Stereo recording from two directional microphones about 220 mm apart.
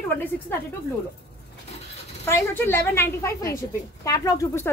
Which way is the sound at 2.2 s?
10° left (ahead or behind).